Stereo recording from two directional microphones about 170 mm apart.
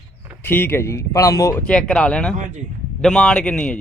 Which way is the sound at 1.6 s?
5° left (ahead or behind).